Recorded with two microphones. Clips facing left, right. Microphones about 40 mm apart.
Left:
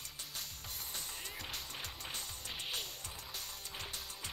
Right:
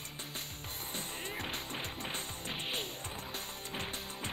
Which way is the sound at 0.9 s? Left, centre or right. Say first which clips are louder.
Right 7 dB; right.